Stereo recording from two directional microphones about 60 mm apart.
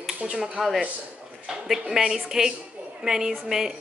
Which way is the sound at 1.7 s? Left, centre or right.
Centre.